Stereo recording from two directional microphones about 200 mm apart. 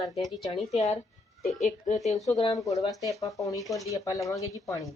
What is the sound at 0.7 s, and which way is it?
Speech, 35° left (ahead or behind).